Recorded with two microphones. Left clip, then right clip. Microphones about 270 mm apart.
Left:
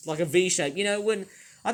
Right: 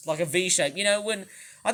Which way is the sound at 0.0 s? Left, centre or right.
Centre.